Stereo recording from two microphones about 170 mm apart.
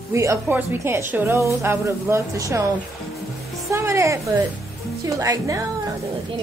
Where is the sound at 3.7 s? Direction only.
15° right (ahead or behind).